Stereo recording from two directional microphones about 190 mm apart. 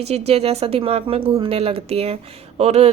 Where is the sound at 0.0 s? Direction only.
35° right (ahead or behind).